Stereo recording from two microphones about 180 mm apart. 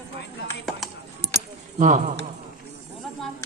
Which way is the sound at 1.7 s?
45° right (ahead or behind).